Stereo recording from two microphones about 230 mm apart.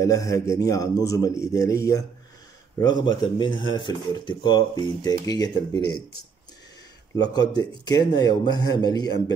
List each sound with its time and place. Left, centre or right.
0.0 s a man's voice: centre
7.2 s a man's voice: centre